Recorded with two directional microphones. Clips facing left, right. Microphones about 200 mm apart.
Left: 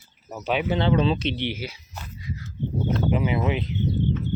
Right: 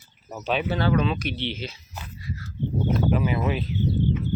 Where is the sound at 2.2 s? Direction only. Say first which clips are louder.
Left 1 dB; 20° left (ahead or behind).